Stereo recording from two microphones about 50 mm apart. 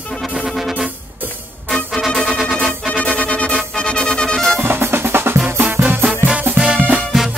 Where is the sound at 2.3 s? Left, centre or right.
Centre.